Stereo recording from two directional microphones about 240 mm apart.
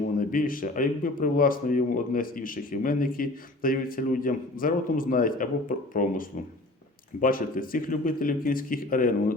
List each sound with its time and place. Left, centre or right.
0.2 s speech: left